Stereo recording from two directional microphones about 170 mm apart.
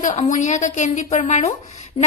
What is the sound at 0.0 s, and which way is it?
A woman's voice, 45° left (ahead or behind).